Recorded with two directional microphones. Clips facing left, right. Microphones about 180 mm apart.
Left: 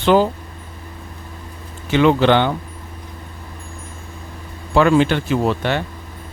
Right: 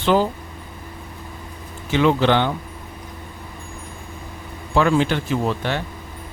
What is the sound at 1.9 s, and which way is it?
Speech, 65° left (ahead or behind).